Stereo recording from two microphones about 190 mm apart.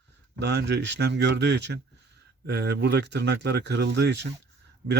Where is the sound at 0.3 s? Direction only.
65° right (ahead or behind).